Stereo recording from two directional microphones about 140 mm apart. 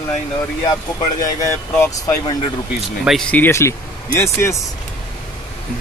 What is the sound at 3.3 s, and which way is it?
Speech, 15° left (ahead or behind).